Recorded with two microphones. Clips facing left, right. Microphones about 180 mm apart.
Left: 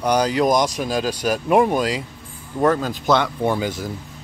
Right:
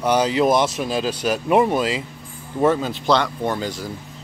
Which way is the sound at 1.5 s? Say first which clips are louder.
Left 1 dB; 5° right (ahead or behind).